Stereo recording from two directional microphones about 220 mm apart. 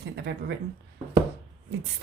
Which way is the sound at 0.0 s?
50° right (ahead or behind).